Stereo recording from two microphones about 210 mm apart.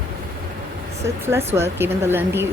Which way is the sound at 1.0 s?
10° right (ahead or behind).